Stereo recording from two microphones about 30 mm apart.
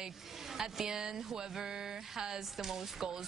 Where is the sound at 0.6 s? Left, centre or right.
Centre.